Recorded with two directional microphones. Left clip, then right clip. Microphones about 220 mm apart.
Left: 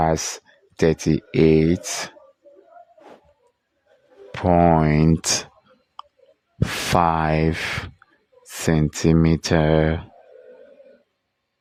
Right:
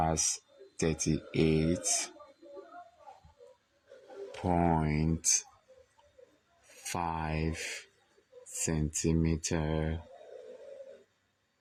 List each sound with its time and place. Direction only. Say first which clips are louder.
0.0 s speech: left 10 dB; 45° left (ahead or behind)
4.3 s speech: left 14 dB; 45° left (ahead or behind)
6.9 s speech: left 16 dB; 45° left (ahead or behind)